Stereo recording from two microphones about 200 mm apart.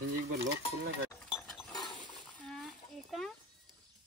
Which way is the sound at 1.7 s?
20° left (ahead or behind).